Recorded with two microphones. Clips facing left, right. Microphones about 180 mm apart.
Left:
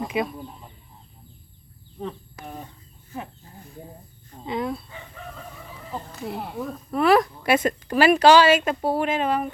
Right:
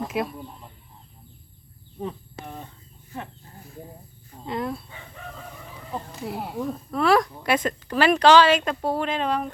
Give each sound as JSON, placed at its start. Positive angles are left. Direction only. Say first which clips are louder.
{"t": 0.0, "sound": "bird", "louder": "left 1 dB", "side_deg": 0}
{"t": 2.4, "sound": "chicken", "louder": "left 1 dB", "side_deg": 10}
{"t": 4.3, "sound": "speech", "louder": "left 1 dB", "side_deg": 0}
{"t": 5.9, "sound": "a woman's voice", "louder": "even", "side_deg": -5}